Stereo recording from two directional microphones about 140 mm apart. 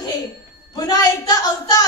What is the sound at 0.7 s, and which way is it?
A woman's voice, 30° left (ahead or behind).